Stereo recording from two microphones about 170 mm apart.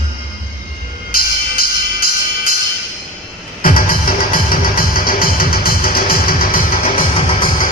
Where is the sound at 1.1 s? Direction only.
60° left (ahead or behind).